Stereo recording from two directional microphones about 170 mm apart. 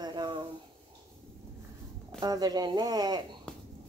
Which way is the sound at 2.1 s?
25° right (ahead or behind).